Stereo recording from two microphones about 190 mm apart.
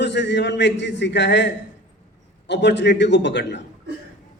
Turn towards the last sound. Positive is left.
turn(degrees=65)  # may be behind; listen again after turning